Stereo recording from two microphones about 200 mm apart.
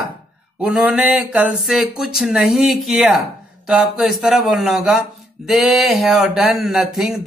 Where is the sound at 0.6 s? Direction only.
5° right (ahead or behind).